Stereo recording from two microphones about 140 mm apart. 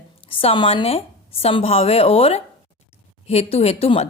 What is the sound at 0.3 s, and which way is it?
Speech, 40° left (ahead or behind).